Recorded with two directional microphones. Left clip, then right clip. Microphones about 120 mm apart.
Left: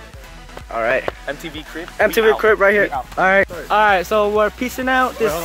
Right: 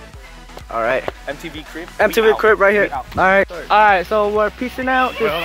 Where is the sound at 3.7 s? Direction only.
15° left (ahead or behind).